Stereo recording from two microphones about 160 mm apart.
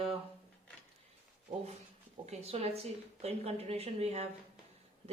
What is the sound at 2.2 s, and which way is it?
A woman's voice, 40° right (ahead or behind).